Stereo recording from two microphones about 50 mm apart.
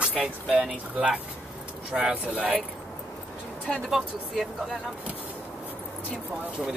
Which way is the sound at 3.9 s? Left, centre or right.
Centre.